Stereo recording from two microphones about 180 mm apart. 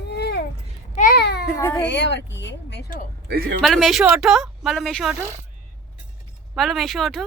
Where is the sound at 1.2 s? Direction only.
65° left (ahead or behind).